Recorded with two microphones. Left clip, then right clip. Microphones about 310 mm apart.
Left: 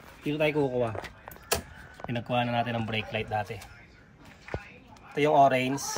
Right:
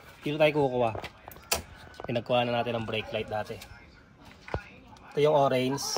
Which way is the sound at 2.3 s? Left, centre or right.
Centre.